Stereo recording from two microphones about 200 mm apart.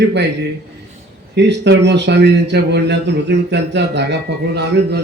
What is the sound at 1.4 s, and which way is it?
A man's voice, 60° right (ahead or behind).